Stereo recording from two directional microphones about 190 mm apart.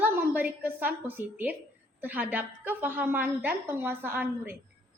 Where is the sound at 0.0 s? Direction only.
10° right (ahead or behind).